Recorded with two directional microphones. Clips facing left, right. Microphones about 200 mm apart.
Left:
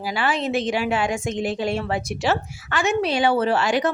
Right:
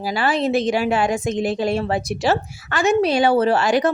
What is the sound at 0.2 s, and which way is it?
A woman's voice, 35° right (ahead or behind).